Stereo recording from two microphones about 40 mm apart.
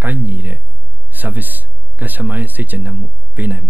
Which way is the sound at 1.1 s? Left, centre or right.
Right.